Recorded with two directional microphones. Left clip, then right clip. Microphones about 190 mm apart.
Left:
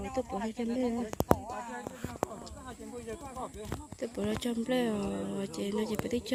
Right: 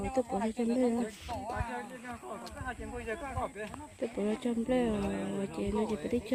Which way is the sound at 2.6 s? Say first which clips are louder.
Right 4 dB; 5° left (ahead or behind).